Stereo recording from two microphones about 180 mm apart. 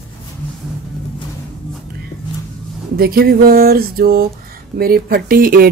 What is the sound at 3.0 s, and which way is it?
Speech, 55° right (ahead or behind).